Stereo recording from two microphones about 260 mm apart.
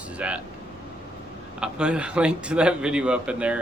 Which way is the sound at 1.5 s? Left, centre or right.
Centre.